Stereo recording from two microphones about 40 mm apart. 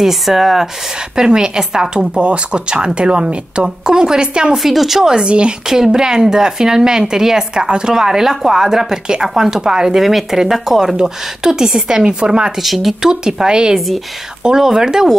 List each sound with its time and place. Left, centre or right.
0.0 s speech: centre
1.1 s speech: centre
4.6 s speech: centre
5.1 s speech: right; by 9.6 s centre
9.6 s speech: centre
9.9 s speech: centre
12.6 s speech: centre
13.0 s speech: centre
13.7 s speech: centre
14.4 s speech: centre